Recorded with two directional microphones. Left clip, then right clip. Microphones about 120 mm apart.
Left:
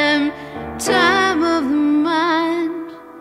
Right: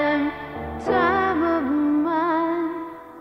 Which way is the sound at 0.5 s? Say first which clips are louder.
Left 3 dB; 30° left (ahead or behind).